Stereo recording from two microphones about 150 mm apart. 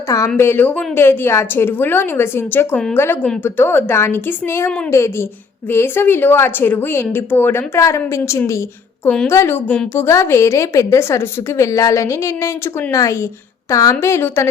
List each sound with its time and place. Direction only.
0.3 s a woman's voice: 15° left (ahead or behind)